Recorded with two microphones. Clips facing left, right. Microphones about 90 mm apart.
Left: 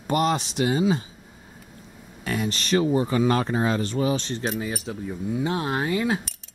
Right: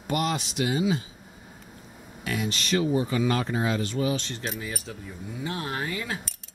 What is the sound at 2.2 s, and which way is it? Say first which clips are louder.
Speech: left 3 dB; 40° left (ahead or behind).